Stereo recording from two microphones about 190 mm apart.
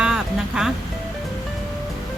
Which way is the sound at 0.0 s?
5° right (ahead or behind).